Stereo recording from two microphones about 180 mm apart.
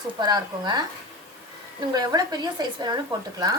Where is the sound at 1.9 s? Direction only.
20° right (ahead or behind).